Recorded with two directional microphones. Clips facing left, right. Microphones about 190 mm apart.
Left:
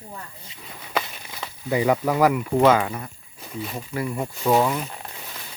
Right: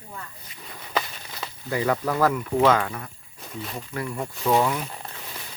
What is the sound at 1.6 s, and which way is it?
Speech, 15° left (ahead or behind).